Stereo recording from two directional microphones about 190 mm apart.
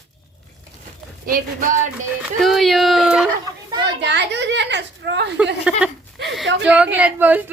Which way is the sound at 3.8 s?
65° right (ahead or behind).